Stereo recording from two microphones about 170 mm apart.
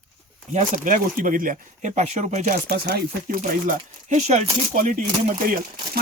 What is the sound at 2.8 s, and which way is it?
Speech, 60° right (ahead or behind).